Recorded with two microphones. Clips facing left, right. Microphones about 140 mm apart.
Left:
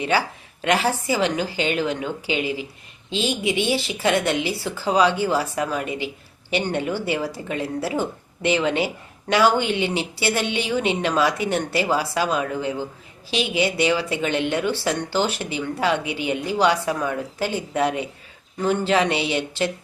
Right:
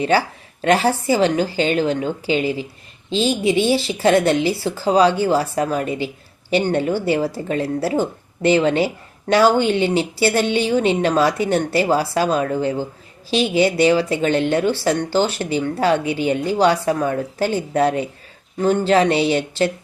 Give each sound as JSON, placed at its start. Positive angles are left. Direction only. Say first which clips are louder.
{"t": 0.6, "sound": "speech", "louder": "right 5 dB", "side_deg": -35}